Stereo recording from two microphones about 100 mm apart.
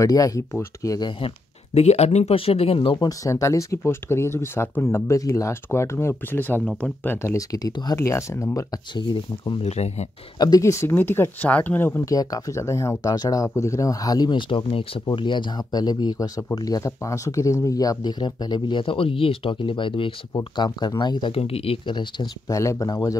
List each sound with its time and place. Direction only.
0.0 s speech: 35° left (ahead or behind)
1.2 s speech: 90° left; by 3.0 s 70° left (ahead or behind)
3.0 s speech: 35° left (ahead or behind)
7.9 s speech: 30° left (ahead or behind)
8.9 s speech: 50° left (ahead or behind)
9.6 s speech: 90° left
10.4 s speech: 35° left (ahead or behind)
12.1 s speech: 35° left (ahead or behind); by 20.2 s 60° left (ahead or behind)
20.3 s speech: 45° left (ahead or behind)
21.3 s speech: 75° left (ahead or behind)
21.8 s speech: 50° left (ahead or behind)
22.5 s speech: 30° left (ahead or behind)